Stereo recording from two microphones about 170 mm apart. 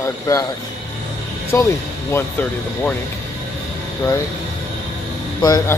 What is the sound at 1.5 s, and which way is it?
Speech, 15° left (ahead or behind).